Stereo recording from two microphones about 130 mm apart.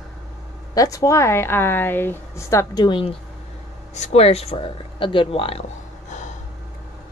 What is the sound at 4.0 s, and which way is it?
Speech, 55° left (ahead or behind).